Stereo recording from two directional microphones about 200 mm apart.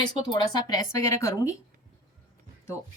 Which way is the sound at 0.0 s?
20° left (ahead or behind).